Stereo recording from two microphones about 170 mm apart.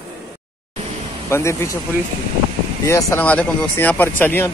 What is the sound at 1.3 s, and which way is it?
Speech, 15° left (ahead or behind).